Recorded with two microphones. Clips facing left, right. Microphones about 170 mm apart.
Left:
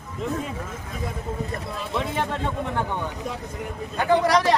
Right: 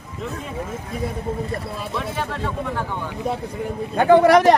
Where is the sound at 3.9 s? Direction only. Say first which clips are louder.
Right 7 dB; 55° right (ahead or behind).